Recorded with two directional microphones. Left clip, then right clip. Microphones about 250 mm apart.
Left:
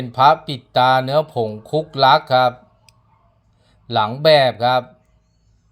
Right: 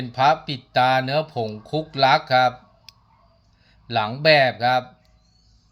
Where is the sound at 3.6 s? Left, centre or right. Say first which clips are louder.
Left 5 dB; centre.